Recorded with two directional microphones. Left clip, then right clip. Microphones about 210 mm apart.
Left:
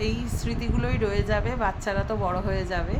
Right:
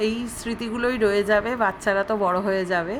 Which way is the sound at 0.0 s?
15° right (ahead or behind).